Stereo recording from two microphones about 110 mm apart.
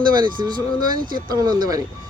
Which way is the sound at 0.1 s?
40° right (ahead or behind).